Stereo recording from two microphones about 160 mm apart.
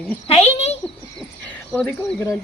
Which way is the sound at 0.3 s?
40° left (ahead or behind).